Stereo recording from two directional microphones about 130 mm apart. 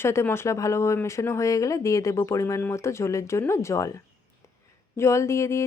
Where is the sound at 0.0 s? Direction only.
20° left (ahead or behind).